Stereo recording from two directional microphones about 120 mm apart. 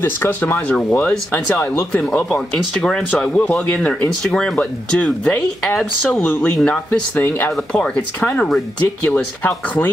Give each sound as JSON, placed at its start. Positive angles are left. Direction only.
{"t": 0.0, "sound": "speech", "side_deg": 15}